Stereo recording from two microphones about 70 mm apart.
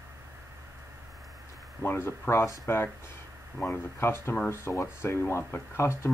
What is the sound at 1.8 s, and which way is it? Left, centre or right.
Speech, left.